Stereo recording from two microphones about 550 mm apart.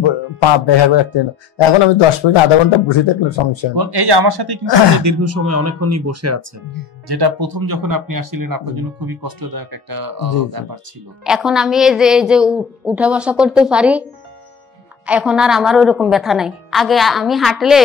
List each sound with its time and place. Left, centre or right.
0.0 s speech: left
3.7 s speech: right
4.9 s speech: right
7.1 s speech: right
11.2 s a woman's voice: centre
15.0 s a woman's voice: centre